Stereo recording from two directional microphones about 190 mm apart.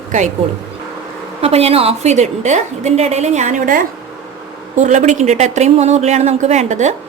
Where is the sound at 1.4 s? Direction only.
30° right (ahead or behind).